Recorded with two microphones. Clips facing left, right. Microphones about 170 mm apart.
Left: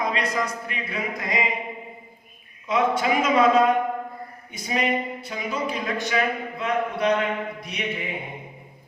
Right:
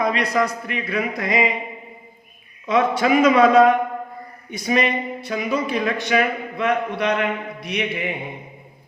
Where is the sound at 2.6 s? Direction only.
70° right (ahead or behind).